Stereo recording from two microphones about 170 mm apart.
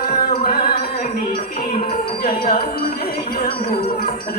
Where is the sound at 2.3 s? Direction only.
60° left (ahead or behind).